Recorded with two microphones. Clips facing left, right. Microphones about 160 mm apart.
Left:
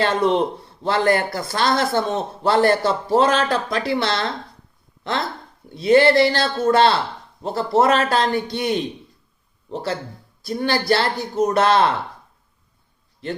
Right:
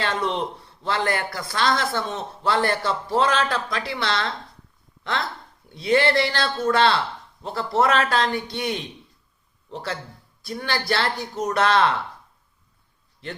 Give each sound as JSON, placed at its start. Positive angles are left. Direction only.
{"t": 0.0, "sound": "a man's voice", "side_deg": 45}
{"t": 5.7, "sound": "a man's voice", "side_deg": 40}